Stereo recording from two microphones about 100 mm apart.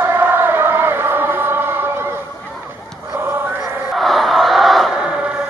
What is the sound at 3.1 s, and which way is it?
Choir, 25° right (ahead or behind).